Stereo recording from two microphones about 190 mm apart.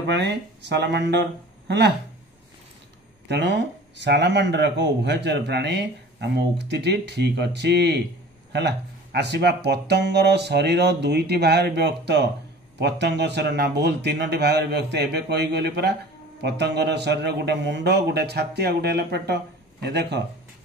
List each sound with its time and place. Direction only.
0.1 s speech: 65° right (ahead or behind)
3.3 s speech: 65° right (ahead or behind)